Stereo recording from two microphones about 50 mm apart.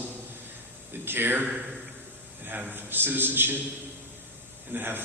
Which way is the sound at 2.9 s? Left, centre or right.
Right.